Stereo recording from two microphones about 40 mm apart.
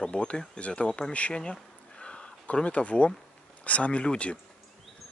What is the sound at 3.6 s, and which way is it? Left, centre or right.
Speech, left.